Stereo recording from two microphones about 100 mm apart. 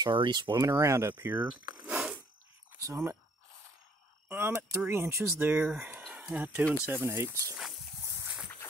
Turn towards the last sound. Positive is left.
turn(degrees=-25)  # may be behind; listen again after turning